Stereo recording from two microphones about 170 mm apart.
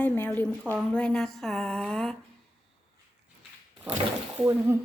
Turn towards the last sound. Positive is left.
turn(degrees=-15)  # may be behind; listen again after turning